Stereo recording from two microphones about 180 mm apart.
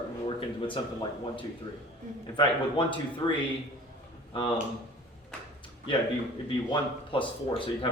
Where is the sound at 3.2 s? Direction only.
25° left (ahead or behind).